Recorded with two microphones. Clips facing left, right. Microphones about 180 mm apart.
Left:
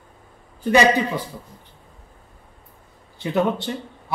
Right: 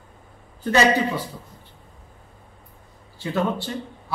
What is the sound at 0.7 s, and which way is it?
Speech, 15° left (ahead or behind).